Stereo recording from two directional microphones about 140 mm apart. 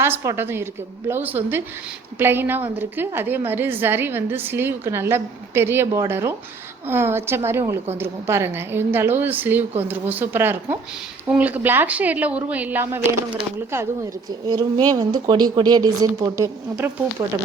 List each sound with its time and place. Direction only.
0.0 s a woman's voice: 20° right (ahead or behind)